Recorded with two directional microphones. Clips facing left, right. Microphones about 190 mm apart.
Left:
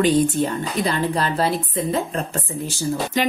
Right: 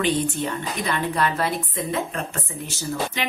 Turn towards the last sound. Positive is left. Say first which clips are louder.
# left 5 dB
turn(degrees=30)  # may be behind; listen again after turning